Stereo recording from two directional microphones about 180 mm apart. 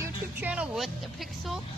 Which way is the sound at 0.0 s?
10° right (ahead or behind).